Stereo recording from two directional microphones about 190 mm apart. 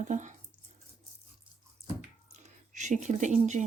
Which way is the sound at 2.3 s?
40° right (ahead or behind).